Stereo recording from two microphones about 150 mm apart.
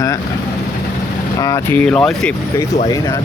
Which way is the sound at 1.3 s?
25° left (ahead or behind).